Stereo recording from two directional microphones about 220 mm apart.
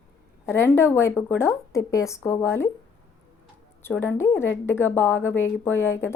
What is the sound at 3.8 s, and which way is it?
A woman's voice, 10° left (ahead or behind).